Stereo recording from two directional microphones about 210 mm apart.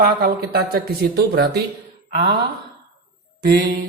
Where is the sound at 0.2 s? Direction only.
45° right (ahead or behind).